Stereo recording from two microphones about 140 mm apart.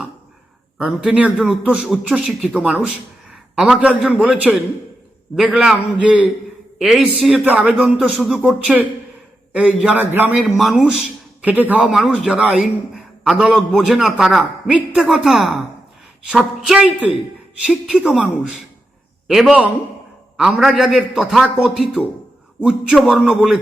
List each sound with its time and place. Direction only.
0.8 s a man's voice: 5° right (ahead or behind)
10.4 s a man's voice: centre (ahead or behind)
11.4 s a man's voice: 10° right (ahead or behind)